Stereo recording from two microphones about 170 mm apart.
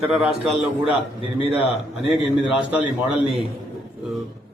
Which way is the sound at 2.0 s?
5° right (ahead or behind).